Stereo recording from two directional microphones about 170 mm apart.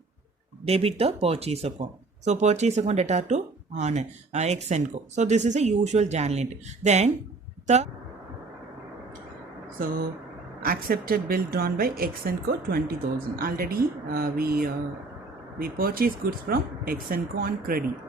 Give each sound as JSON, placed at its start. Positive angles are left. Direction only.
{"t": 0.6, "sound": "speech", "side_deg": -35}
{"t": 10.6, "sound": "a woman's voice", "side_deg": -60}